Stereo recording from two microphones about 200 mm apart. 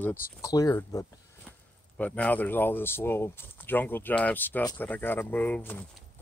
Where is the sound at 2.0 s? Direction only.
5° left (ahead or behind).